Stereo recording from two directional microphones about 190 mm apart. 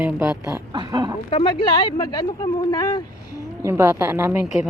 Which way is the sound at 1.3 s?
25° left (ahead or behind).